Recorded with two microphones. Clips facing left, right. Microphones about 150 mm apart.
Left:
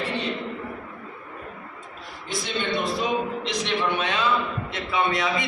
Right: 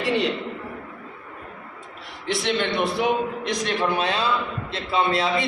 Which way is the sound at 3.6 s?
45° right (ahead or behind).